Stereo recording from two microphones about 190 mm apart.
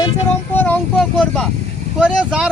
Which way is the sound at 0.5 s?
10° left (ahead or behind).